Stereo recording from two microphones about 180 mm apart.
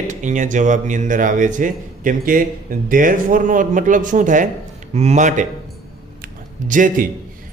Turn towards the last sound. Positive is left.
turn(degrees=-50)  # may be behind; listen again after turning